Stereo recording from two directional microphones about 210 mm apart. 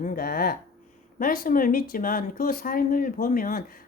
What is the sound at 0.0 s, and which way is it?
Speech, 40° left (ahead or behind).